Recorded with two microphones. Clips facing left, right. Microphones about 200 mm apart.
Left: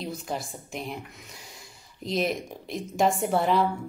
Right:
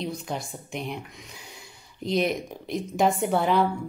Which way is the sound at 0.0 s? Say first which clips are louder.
Right 1 dB; centre (ahead or behind).